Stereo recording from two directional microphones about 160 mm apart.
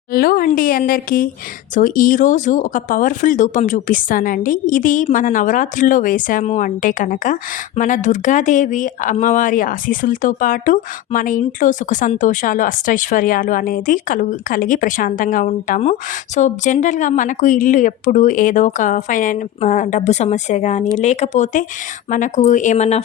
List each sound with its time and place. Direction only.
0.1 s a woman's voice: 65° left (ahead or behind); by 23.0 s 45° left (ahead or behind)